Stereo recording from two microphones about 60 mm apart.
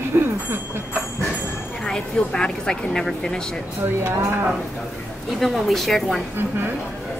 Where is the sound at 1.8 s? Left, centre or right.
Centre.